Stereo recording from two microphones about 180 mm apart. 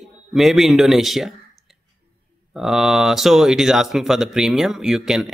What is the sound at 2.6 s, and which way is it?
Speech, 5° right (ahead or behind).